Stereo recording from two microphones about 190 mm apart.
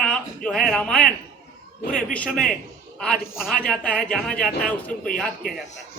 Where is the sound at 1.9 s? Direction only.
45° left (ahead or behind).